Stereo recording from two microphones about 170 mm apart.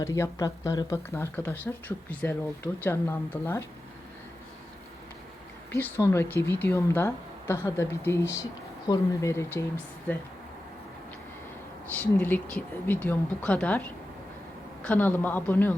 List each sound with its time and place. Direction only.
0.0 s speech: 20° left (ahead or behind)
5.7 s speech: 10° left (ahead or behind)
11.9 s speech: 10° left (ahead or behind)
14.8 s speech: 10° left (ahead or behind)